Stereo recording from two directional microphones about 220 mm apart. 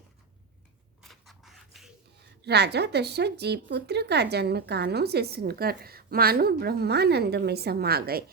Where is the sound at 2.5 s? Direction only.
50° right (ahead or behind).